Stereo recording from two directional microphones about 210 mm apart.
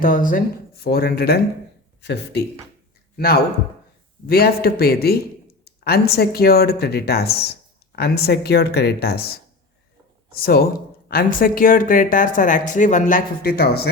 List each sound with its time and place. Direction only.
0.0 s speech: 40° left (ahead or behind)
10.3 s speech: 45° left (ahead or behind)